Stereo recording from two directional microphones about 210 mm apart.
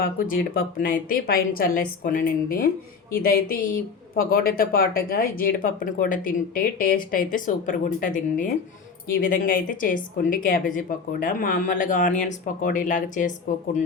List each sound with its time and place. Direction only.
0.0 s a woman's voice: 45° left (ahead or behind)